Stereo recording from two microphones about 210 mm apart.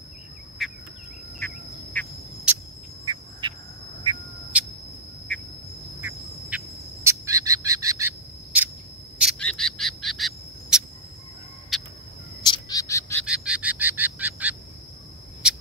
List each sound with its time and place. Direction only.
0.6 s insect: centre (ahead or behind)
2.0 s duck: 10° left (ahead or behind)
2.5 s cricket: 5° right (ahead or behind)
3.1 s cricket: 20° right (ahead or behind)
4.5 s music: 5° right (ahead or behind)
5.9 s duck: 10° right (ahead or behind)
9.2 s bird: centre (ahead or behind)
11.7 s a sound: centre (ahead or behind)
12.4 s owl: 20° left (ahead or behind)
13.2 s a sound: 5° right (ahead or behind)